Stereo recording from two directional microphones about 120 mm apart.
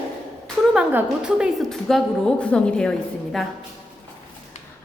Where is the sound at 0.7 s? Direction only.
5° right (ahead or behind).